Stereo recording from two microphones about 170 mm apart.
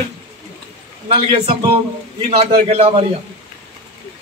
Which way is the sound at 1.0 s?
30° right (ahead or behind).